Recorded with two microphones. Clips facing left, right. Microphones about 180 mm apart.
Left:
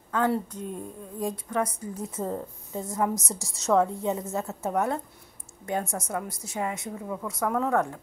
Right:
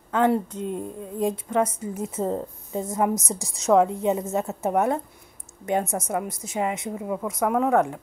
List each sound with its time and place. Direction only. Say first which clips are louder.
0.1 s a woman's voice: right 4 dB; 25° right (ahead or behind)